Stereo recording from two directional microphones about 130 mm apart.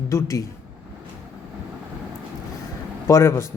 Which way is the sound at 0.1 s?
20° left (ahead or behind).